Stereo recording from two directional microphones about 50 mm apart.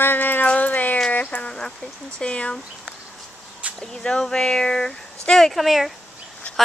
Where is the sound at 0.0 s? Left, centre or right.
Left.